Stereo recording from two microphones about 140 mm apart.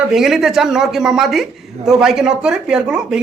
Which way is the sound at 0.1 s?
5° right (ahead or behind).